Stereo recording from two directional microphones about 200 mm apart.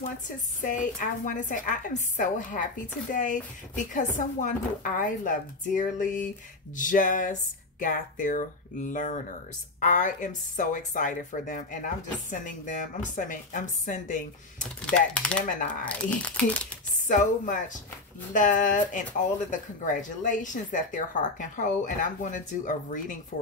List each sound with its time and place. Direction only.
0.6 s a woman's voice: 40° left (ahead or behind)
14.9 s speech: 5° left (ahead or behind)
15.4 s a woman's voice: 40° left (ahead or behind)
15.8 s speech: 5° left (ahead or behind)
17.1 s a woman's voice: 40° left (ahead or behind)